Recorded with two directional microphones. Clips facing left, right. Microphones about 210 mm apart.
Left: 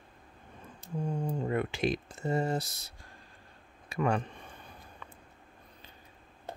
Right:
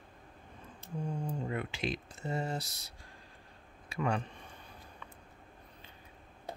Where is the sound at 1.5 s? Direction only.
50° left (ahead or behind).